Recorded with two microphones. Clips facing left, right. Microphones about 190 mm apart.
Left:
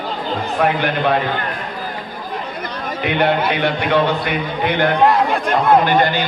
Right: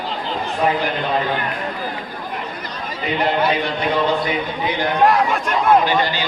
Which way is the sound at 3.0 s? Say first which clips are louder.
Left 2 dB; 65° left (ahead or behind).